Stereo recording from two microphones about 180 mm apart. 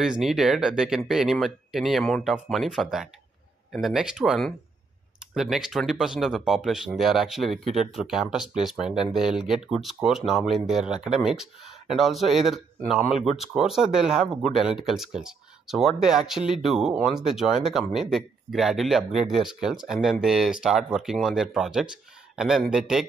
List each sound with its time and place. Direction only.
0.0 s speech: centre (ahead or behind)